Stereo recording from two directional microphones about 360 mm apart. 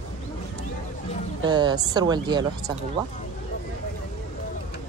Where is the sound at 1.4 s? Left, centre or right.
Centre.